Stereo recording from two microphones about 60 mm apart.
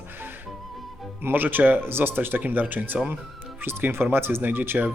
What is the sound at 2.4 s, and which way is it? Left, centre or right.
Speech, right.